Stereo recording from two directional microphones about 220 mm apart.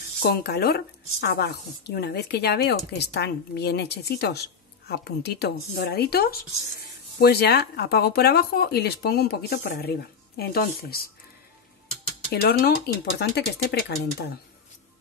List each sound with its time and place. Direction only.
0.2 s speech: 50° left (ahead or behind)
12.3 s speech: 45° left (ahead or behind)